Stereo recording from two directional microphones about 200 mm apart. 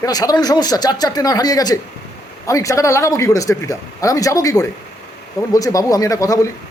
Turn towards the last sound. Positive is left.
turn(degrees=15)  # may be behind; listen again after turning